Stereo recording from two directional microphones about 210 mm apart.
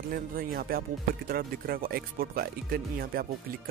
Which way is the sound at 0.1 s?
45° right (ahead or behind).